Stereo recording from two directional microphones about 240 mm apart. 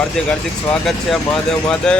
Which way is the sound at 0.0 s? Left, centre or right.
Centre.